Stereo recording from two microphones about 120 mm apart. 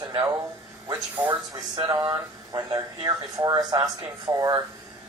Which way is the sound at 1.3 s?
40° right (ahead or behind).